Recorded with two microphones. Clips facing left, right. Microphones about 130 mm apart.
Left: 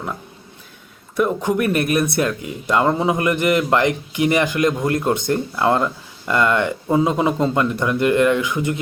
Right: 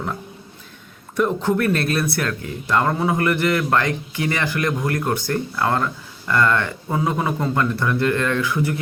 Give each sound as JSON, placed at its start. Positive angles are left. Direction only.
{"t": 1.1, "sound": "speech", "side_deg": 10}